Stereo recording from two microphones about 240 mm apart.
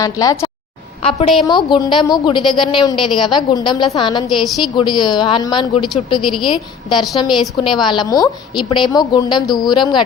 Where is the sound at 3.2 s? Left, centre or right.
Centre.